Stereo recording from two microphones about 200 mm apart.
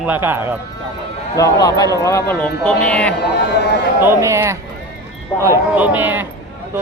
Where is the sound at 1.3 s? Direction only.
15° left (ahead or behind).